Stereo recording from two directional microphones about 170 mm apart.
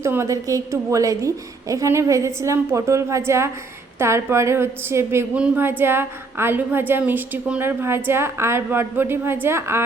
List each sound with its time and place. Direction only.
0.0 s a woman's voice: 15° right (ahead or behind)